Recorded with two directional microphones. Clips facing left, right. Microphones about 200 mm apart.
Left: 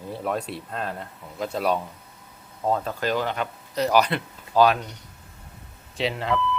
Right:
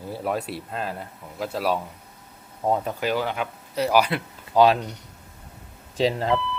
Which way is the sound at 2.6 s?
15° right (ahead or behind).